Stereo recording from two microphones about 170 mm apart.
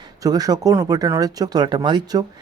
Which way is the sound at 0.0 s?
20° right (ahead or behind).